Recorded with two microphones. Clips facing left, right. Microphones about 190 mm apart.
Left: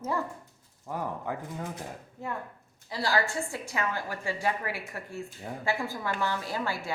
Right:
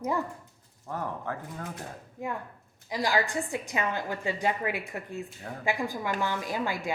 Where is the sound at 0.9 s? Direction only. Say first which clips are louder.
Left 1 dB; 10° left (ahead or behind).